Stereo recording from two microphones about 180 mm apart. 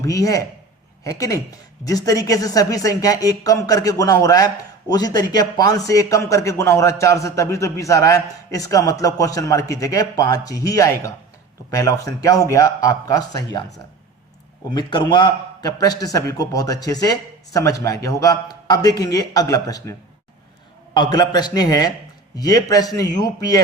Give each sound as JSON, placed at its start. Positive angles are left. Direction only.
{"t": 0.0, "sound": "a man's voice", "side_deg": 20}
{"t": 14.7, "sound": "a man's voice", "side_deg": 25}